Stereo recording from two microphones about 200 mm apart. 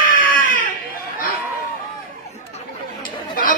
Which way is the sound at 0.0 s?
45° left (ahead or behind).